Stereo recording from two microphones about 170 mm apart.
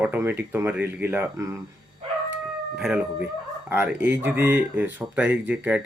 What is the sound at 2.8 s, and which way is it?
Speech, 5° right (ahead or behind).